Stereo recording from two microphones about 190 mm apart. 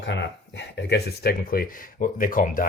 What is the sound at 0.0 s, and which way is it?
Speech, 70° left (ahead or behind).